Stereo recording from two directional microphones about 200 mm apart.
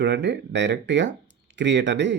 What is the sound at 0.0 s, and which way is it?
Speech, 60° right (ahead or behind).